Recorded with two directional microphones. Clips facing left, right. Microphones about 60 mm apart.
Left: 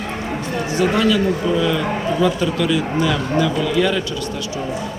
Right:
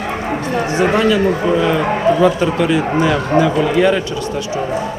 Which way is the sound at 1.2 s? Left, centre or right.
Right.